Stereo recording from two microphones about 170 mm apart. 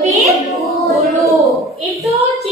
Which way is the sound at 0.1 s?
Centre (ahead or behind).